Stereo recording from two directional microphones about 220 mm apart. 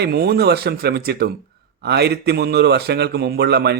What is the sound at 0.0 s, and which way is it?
A man's voice, 45° right (ahead or behind).